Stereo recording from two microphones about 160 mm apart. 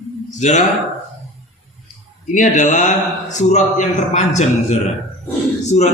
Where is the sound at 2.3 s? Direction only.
50° left (ahead or behind).